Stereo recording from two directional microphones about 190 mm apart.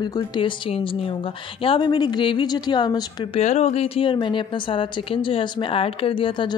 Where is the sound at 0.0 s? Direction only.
20° left (ahead or behind).